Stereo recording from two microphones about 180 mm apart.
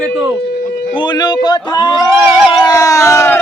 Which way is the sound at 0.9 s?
25° left (ahead or behind).